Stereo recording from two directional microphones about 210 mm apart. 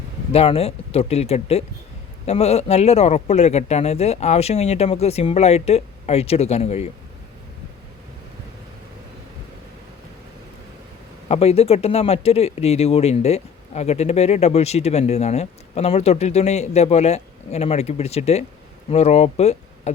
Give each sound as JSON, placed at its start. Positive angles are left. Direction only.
{"t": 0.3, "sound": "speech", "side_deg": 25}
{"t": 11.3, "sound": "speech", "side_deg": 30}